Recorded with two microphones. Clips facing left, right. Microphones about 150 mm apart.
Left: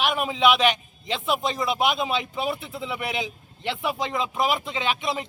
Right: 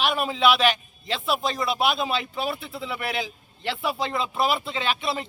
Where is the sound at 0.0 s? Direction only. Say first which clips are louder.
Even; 15° left (ahead or behind).